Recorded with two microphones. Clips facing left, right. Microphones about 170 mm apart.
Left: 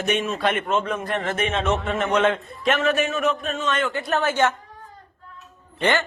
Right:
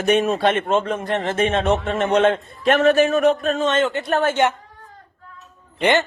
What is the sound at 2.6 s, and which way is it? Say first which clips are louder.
A man's voice: right 6 dB; 45° right (ahead or behind).